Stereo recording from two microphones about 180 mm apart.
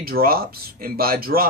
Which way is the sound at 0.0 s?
55° right (ahead or behind).